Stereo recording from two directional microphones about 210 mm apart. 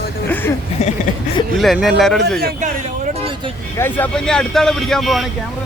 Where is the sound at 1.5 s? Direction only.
Centre (ahead or behind).